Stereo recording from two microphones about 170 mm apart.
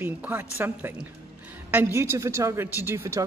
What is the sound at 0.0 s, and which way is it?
Speech, 10° right (ahead or behind).